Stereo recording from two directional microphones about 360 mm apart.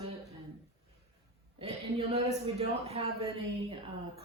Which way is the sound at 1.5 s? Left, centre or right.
Centre.